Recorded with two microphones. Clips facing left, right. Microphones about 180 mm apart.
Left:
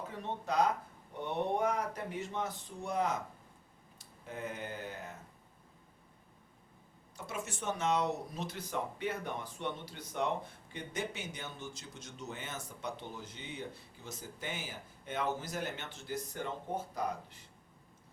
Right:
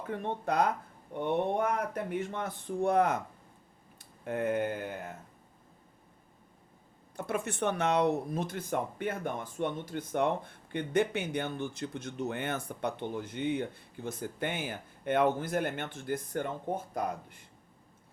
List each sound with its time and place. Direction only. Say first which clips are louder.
0.1 s speech: right 7 dB; 55° right (ahead or behind)
7.2 s speech: right 9 dB; 55° right (ahead or behind)